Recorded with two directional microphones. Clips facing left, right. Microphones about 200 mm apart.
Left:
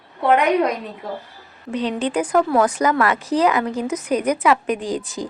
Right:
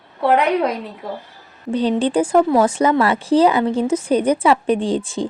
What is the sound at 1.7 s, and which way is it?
Speech, 30° right (ahead or behind).